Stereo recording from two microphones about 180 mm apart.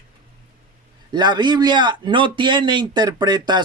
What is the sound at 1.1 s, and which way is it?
Speech, 25° right (ahead or behind).